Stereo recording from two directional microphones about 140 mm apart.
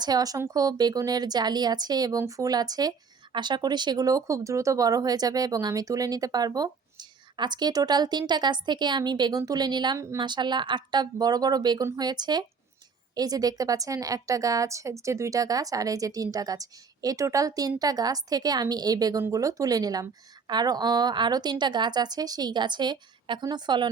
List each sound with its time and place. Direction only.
0.0 s a woman's voice: 25° right (ahead or behind)